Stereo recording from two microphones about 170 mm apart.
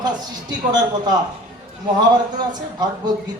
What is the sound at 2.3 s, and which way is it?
Speech, 25° right (ahead or behind).